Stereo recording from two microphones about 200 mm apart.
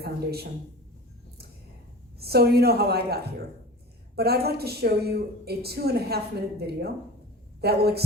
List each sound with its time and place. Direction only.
0.0 s a woman's voice: 50° right (ahead or behind)
2.2 s a woman's voice: 50° right (ahead or behind)